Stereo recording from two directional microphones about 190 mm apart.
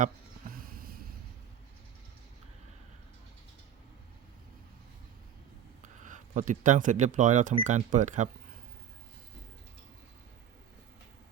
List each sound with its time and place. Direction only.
5.8 s speech: 40° right (ahead or behind)